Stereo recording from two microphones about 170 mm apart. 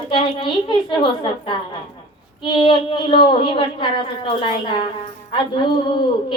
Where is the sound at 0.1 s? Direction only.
30° left (ahead or behind).